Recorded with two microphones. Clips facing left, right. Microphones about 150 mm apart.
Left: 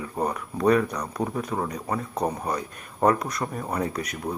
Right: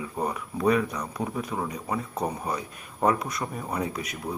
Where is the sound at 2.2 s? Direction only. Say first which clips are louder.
Left 3 dB; 5° right (ahead or behind).